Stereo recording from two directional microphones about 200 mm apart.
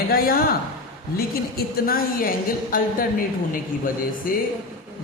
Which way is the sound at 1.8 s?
45° left (ahead or behind).